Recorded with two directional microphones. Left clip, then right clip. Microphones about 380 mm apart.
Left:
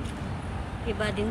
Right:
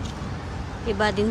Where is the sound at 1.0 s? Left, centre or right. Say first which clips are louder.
Right 8 dB; centre.